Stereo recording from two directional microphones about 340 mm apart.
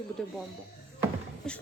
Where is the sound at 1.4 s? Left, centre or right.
Centre.